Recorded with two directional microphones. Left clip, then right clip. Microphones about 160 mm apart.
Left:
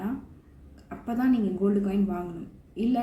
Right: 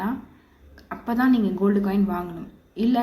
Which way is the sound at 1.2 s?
15° left (ahead or behind).